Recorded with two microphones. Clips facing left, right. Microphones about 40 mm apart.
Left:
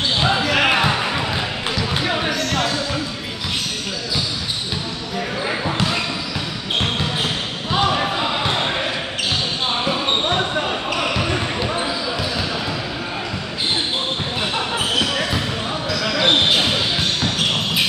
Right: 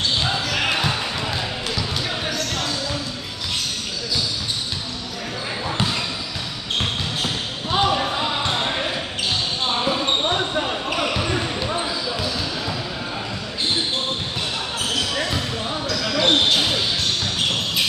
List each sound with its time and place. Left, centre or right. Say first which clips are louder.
0.2 s basketball bounce: left 5 dB; left
5.5 s basketball bounce: left 1 dB; left
14.8 s basketball bounce: left 2 dB; left